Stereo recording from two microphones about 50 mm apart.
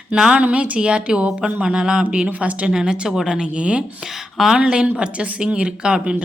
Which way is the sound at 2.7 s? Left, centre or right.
Centre.